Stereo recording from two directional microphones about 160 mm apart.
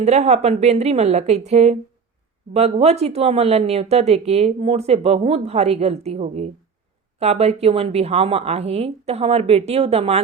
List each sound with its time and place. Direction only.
0.0 s a woman's voice: 45° right (ahead or behind)